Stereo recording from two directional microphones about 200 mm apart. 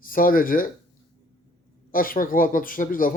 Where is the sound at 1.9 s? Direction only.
45° left (ahead or behind).